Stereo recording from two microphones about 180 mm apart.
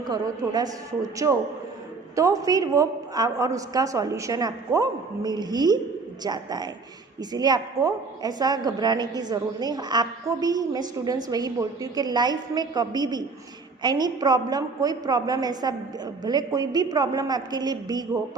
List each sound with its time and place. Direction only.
0.0 s a woman's voice: 20° right (ahead or behind)